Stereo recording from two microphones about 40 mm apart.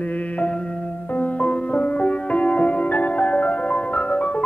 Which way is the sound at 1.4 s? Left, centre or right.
Left.